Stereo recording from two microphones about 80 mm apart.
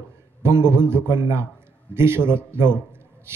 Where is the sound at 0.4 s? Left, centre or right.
Right.